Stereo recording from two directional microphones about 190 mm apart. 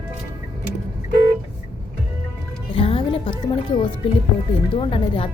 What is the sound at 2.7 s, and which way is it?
Music, 30° left (ahead or behind).